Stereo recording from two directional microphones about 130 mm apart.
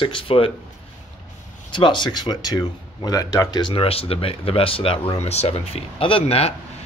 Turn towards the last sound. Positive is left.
turn(degrees=50)  # may be behind; listen again after turning